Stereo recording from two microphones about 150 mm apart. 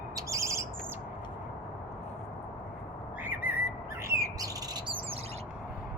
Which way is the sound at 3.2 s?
10° right (ahead or behind).